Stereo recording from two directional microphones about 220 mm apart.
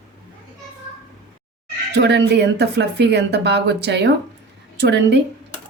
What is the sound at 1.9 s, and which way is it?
A woman's voice, 50° right (ahead or behind).